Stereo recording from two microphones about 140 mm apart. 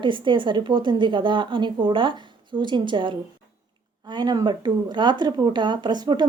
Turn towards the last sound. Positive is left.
turn(degrees=-30)  # may be behind; listen again after turning